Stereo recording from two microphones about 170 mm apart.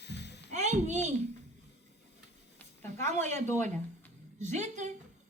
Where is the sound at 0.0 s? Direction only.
80° left.